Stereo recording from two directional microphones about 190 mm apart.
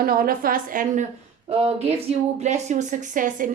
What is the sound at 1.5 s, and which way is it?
A woman's voice, 35° right (ahead or behind).